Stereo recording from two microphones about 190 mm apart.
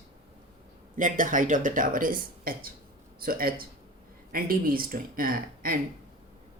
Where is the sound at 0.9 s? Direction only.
45° right (ahead or behind).